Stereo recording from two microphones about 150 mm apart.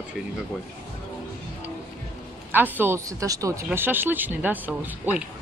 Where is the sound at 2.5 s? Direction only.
15° right (ahead or behind).